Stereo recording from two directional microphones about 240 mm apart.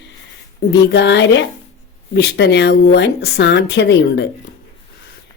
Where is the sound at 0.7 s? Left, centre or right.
Left.